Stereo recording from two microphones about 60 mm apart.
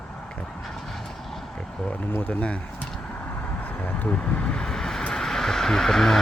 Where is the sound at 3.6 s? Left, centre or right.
Left; by 5.0 s centre.